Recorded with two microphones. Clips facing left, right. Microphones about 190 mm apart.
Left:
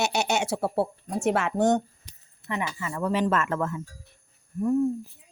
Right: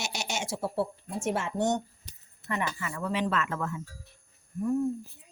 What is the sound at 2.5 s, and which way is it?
Speech, 20° left (ahead or behind).